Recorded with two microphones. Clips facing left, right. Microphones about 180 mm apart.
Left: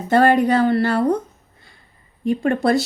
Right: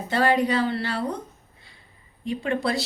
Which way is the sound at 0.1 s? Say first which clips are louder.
Left 7 dB; 50° left (ahead or behind).